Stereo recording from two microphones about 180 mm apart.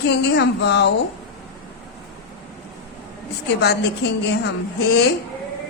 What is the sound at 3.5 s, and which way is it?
A woman's voice, 65° left (ahead or behind).